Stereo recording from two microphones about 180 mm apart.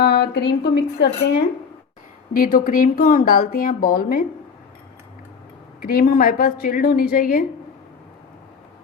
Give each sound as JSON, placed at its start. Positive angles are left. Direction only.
{"t": 0.0, "sound": "speech", "side_deg": 65}
{"t": 2.3, "sound": "speech", "side_deg": 50}
{"t": 5.8, "sound": "speech", "side_deg": 50}